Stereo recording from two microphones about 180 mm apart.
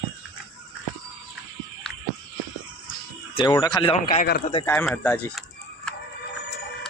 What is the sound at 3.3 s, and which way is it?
Speech, 25° left (ahead or behind).